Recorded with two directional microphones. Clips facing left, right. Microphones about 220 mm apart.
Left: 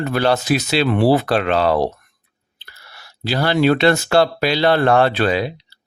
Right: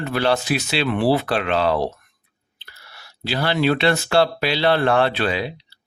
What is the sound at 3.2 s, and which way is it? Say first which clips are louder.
Speech: left 4 dB; 45° left (ahead or behind).